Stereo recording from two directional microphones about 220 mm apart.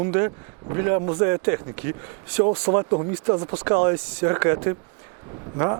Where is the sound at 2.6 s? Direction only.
25° right (ahead or behind).